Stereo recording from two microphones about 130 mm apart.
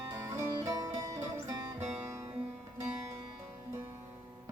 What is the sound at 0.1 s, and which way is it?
Music, 20° right (ahead or behind).